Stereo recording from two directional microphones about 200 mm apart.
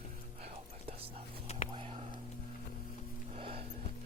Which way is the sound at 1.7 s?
30° right (ahead or behind).